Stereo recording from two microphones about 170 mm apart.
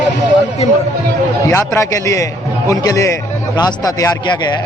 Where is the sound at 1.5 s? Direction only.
15° left (ahead or behind).